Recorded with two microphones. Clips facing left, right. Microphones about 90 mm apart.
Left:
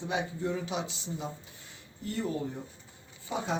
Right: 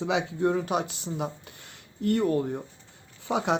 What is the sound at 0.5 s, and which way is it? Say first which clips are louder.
Speech: right 7 dB; 55° right (ahead or behind).